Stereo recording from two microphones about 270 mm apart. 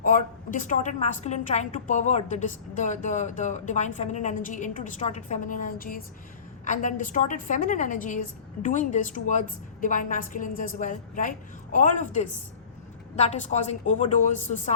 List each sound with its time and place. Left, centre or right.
0.0 s a woman's voice: left